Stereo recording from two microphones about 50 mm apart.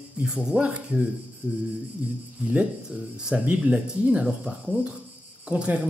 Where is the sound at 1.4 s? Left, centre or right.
Right.